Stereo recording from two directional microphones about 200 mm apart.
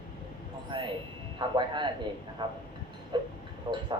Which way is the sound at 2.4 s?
25° right (ahead or behind).